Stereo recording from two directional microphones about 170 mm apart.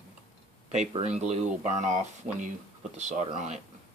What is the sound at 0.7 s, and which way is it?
Speech, 40° right (ahead or behind).